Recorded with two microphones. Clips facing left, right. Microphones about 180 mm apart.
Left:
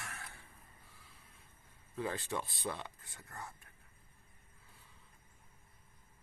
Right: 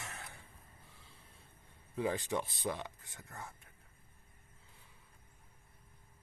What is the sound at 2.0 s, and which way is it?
Speech, 15° right (ahead or behind).